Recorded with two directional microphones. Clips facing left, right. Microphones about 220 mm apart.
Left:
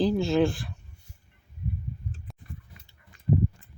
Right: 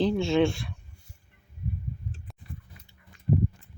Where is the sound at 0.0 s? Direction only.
Centre (ahead or behind).